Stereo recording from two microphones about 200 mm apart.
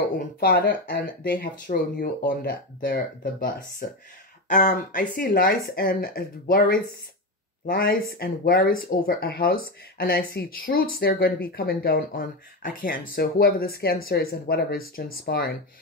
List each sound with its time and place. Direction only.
0.4 s speech: 50° left (ahead or behind)